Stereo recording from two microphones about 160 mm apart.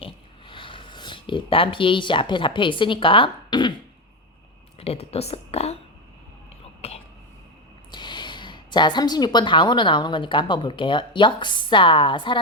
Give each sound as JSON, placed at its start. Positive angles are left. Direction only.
{"t": 0.0, "sound": "speech", "side_deg": 30}
{"t": 4.8, "sound": "speech", "side_deg": 40}
{"t": 6.8, "sound": "throat clearing", "side_deg": 40}
{"t": 7.9, "sound": "speech", "side_deg": 30}